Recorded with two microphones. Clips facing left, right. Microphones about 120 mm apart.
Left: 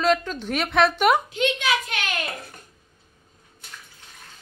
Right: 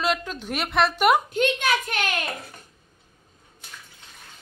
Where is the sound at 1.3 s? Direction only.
50° right (ahead or behind).